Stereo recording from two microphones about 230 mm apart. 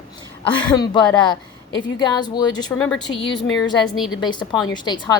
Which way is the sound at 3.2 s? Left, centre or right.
Left.